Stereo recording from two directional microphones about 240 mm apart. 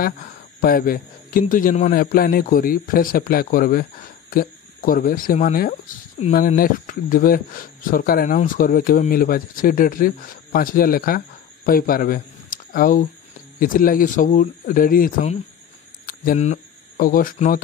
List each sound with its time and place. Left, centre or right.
0.6 s speech: left